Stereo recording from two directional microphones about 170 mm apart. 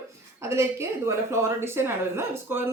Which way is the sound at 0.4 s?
15° right (ahead or behind).